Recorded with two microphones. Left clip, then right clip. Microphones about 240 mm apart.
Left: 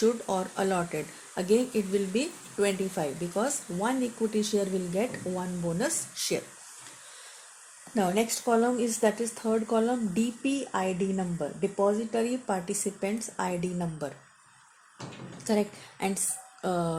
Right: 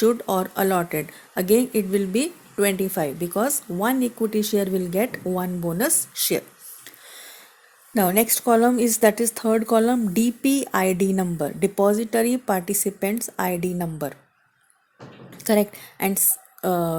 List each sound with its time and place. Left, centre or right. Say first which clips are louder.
0.0 s speech: right 6 dB; right
7.9 s a woman's voice: right 7 dB; right
15.4 s a woman's voice: right 8 dB; right